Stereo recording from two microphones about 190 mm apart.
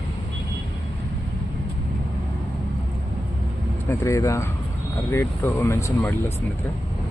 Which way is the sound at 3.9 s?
15° left (ahead or behind).